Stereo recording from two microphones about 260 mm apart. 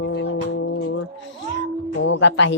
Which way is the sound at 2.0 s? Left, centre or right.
Left.